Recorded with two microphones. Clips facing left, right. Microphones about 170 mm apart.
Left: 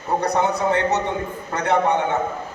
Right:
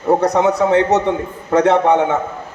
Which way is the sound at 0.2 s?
90° right.